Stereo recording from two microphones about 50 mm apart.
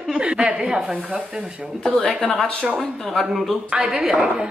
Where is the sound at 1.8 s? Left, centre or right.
Centre.